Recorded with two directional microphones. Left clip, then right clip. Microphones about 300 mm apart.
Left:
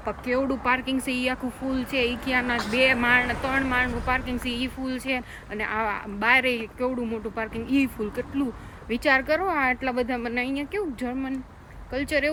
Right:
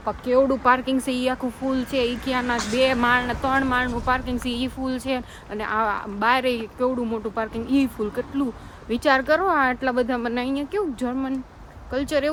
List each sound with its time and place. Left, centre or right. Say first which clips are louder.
0.0 s speech: right 6 dB; centre